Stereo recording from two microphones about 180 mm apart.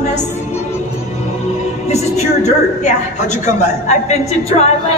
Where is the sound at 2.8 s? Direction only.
40° left (ahead or behind).